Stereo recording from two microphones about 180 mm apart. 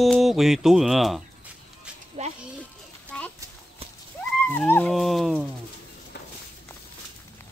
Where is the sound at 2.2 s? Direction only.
40° right (ahead or behind).